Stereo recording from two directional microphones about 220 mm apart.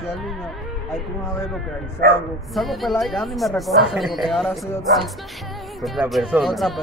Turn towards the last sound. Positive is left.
turn(degrees=0)  # may be behind; listen again after turning